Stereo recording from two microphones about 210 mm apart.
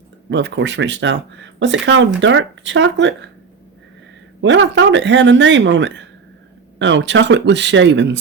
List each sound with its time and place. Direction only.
0.3 s speech: 60° right (ahead or behind)
4.4 s speech: 60° right (ahead or behind)